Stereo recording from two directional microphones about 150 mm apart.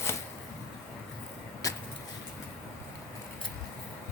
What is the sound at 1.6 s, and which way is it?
Vehicle, 20° left (ahead or behind).